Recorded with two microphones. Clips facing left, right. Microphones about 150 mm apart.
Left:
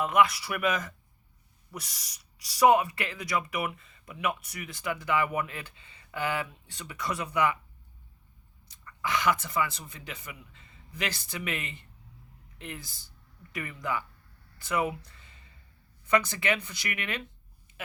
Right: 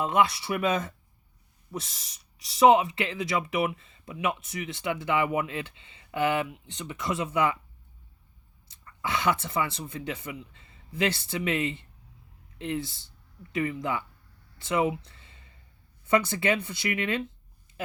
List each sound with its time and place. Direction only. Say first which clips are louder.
0.0 s speech: even; 30° right (ahead or behind)
8.6 s speech: right 1 dB; 25° right (ahead or behind)